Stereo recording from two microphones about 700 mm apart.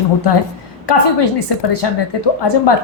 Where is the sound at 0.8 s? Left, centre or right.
Left.